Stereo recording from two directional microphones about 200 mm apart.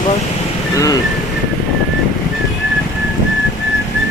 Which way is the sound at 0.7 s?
15° left (ahead or behind).